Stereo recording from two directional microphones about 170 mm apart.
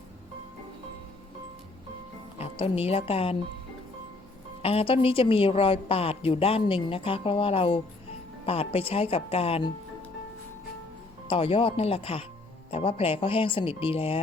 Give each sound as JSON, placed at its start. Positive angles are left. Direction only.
{"t": 2.4, "sound": "a woman's voice", "side_deg": 35}
{"t": 4.6, "sound": "a woman's voice", "side_deg": 35}
{"t": 11.3, "sound": "a woman's voice", "side_deg": 30}